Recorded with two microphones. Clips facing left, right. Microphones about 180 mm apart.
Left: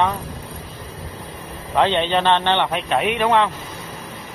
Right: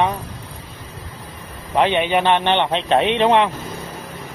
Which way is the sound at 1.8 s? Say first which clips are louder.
Right 1 dB; 10° right (ahead or behind).